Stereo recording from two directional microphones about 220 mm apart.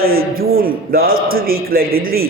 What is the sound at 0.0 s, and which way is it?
A man's voice, 40° right (ahead or behind).